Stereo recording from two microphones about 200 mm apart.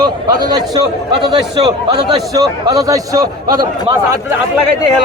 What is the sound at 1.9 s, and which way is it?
A man's voice, 15° right (ahead or behind).